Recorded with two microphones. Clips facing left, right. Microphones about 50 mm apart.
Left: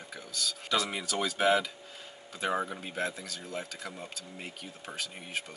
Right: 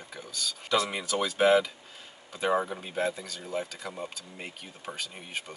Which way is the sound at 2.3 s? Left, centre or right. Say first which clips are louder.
Right 4 dB; centre.